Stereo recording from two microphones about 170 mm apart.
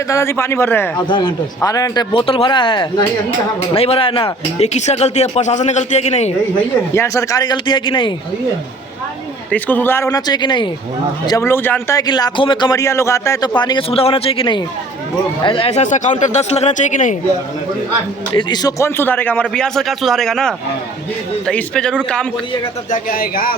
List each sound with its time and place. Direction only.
0.1 s a man's voice: 15° left (ahead or behind)
1.0 s speech: 30° left (ahead or behind)
6.9 s speech: 15° left (ahead or behind)
9.5 s speech: 10° left (ahead or behind); by 10.7 s 25° left (ahead or behind)
11.3 s speech: 15° left (ahead or behind); by 17.2 s 45° left (ahead or behind)
18.3 s a man's voice: 25° left (ahead or behind); by 22.3 s 5° left (ahead or behind)
22.9 s speech: 60° left (ahead or behind)